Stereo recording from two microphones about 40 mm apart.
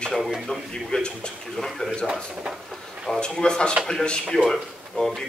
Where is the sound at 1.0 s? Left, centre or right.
Left.